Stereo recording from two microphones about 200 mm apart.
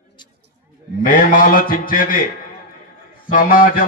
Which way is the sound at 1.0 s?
45° left (ahead or behind).